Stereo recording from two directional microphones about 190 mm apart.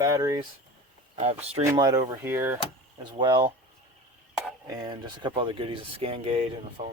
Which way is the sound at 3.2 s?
25° right (ahead or behind).